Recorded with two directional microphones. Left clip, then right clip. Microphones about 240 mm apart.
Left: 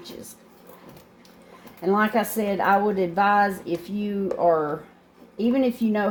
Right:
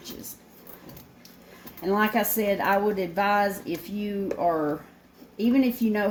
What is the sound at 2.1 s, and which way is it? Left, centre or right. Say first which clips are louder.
Speech: left 1 dB; centre.